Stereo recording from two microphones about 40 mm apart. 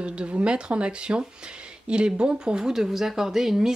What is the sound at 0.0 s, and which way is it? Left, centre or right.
Speech, right.